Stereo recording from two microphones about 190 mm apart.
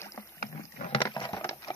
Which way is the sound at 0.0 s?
15° left (ahead or behind).